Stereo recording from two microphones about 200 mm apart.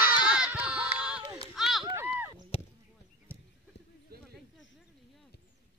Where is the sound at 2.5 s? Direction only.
30° left (ahead or behind).